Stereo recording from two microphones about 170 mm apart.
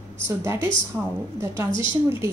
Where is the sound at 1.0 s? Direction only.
5° right (ahead or behind).